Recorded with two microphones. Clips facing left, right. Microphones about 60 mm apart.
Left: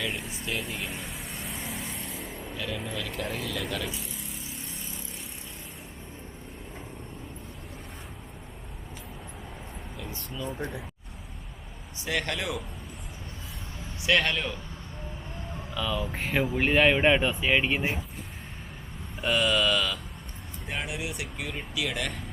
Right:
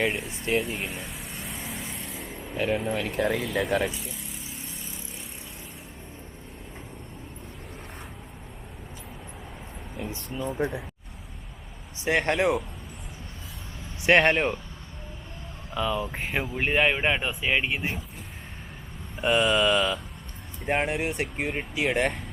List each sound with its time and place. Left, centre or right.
0.1 s speech: centre
0.6 s vehicle: centre
2.6 s speech: right
10.3 s speech: right
12.0 s speech: right
14.0 s speech: right
15.7 s speech: centre
19.2 s speech: right
20.7 s speech: right